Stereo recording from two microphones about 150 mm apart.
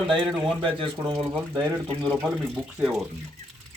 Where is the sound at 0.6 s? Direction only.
35° right (ahead or behind).